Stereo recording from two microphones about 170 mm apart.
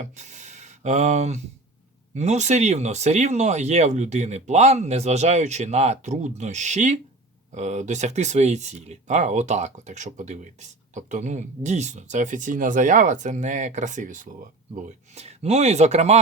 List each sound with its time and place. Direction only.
0.0 s speech: 45° right (ahead or behind)